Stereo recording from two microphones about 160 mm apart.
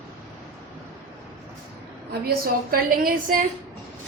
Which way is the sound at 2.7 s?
65° right (ahead or behind).